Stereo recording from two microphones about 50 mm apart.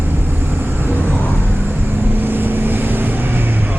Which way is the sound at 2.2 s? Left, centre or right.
Right.